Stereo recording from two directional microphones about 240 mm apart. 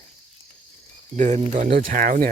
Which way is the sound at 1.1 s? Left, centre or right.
Right.